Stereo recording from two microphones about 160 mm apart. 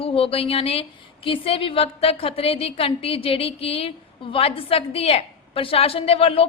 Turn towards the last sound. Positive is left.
turn(degrees=35)  # may be behind; listen again after turning